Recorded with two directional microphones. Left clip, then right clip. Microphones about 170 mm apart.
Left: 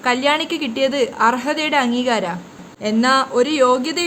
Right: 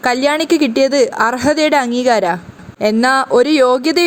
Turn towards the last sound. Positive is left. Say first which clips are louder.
# right 4 dB
turn(degrees=-45)  # may be behind; listen again after turning